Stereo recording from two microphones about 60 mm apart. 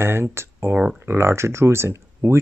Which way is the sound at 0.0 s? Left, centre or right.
Right.